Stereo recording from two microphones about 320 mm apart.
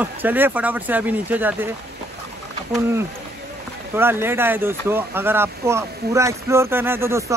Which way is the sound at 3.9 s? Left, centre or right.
Centre.